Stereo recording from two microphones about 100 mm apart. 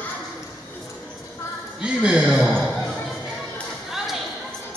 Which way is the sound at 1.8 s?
10° right (ahead or behind).